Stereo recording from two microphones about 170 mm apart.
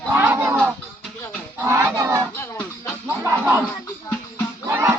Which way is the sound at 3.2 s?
10° right (ahead or behind).